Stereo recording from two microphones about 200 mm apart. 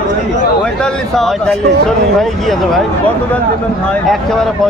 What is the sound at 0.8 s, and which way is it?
Speech, 5° left (ahead or behind).